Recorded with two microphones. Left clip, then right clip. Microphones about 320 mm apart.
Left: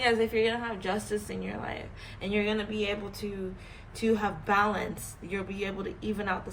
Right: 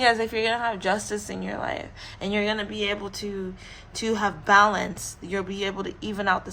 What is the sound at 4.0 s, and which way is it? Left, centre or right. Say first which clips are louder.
A woman's voice: right 3 dB; right.